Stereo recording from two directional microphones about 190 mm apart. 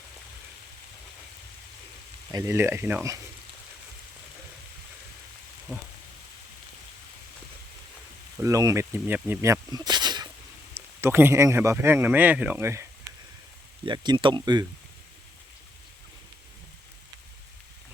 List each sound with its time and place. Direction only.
2.3 s speech: 15° right (ahead or behind)
8.4 s speech: 15° right (ahead or behind)